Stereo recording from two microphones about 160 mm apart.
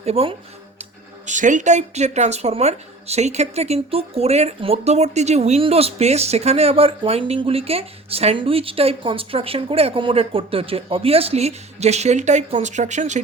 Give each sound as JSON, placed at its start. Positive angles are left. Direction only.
{"t": 0.0, "sound": "speech", "side_deg": -40}
{"t": 0.8, "sound": "speech", "side_deg": -50}